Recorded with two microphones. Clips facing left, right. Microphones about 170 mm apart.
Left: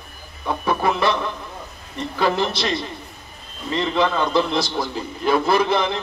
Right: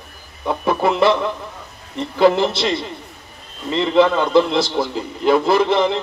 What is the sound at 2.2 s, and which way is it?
Speech, 25° right (ahead or behind).